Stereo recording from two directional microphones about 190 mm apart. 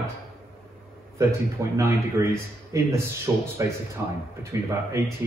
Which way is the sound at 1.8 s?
15° right (ahead or behind).